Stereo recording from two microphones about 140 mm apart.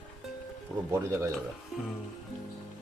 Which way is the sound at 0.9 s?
20° right (ahead or behind).